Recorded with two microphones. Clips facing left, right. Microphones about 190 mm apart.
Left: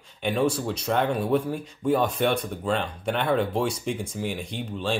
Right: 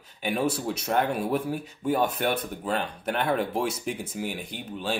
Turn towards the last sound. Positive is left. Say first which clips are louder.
# left 3 dB
turn(degrees=-5)  # may be behind; listen again after turning